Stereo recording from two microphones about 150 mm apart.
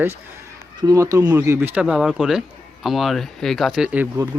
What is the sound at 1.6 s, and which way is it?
Speech, 10° right (ahead or behind).